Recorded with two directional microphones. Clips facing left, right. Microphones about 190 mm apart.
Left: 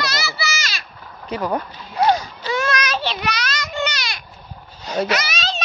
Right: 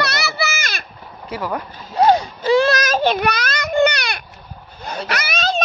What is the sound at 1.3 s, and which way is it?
Speech, 20° left (ahead or behind).